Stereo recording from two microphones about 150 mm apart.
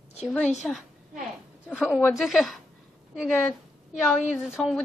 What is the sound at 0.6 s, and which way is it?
Speech, centre (ahead or behind).